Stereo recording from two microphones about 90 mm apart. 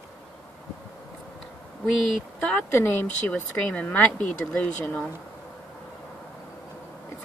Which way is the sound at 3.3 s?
15° left (ahead or behind).